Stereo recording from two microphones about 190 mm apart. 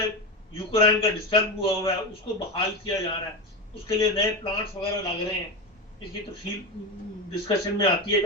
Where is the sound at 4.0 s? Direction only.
30° left (ahead or behind).